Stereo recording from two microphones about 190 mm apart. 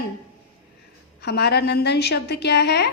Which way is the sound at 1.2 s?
60° left (ahead or behind).